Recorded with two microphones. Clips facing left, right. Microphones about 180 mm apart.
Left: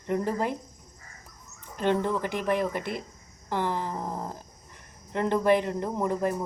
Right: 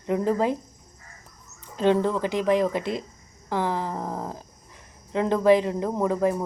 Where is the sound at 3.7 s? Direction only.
15° right (ahead or behind).